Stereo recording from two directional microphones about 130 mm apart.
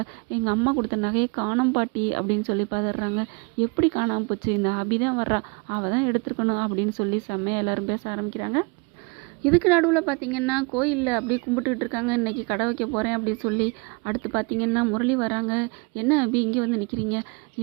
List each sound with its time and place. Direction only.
0.0 s speech: 30° right (ahead or behind)
9.5 s speech: 10° right (ahead or behind)